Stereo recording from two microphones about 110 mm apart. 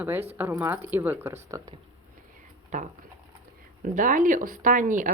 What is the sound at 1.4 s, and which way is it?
Speech, 30° right (ahead or behind).